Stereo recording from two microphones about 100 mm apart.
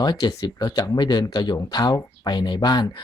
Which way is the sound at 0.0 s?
40° left (ahead or behind).